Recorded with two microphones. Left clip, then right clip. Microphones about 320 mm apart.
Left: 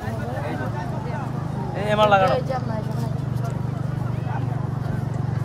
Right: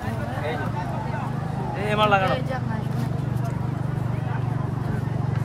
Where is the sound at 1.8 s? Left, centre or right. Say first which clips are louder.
Left 3 dB; left.